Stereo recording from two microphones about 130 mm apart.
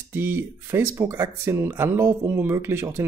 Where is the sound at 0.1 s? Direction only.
15° right (ahead or behind).